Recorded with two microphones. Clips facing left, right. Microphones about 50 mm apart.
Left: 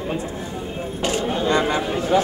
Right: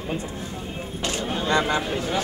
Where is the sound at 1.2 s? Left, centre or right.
Centre.